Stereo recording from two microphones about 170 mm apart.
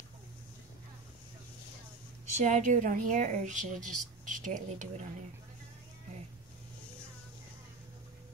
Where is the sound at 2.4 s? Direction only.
50° right (ahead or behind).